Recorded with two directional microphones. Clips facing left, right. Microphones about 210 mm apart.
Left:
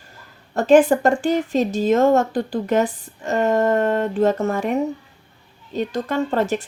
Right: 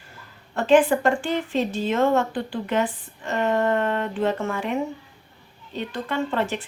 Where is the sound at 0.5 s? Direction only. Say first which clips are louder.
Left 4 dB; 40° left (ahead or behind).